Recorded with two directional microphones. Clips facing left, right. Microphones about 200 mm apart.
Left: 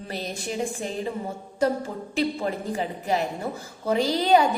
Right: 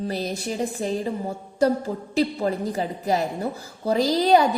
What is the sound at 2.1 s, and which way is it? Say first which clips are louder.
A woman's voice: right 3 dB; 40° right (ahead or behind).